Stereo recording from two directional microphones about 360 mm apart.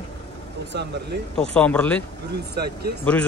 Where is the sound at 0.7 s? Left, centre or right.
Right.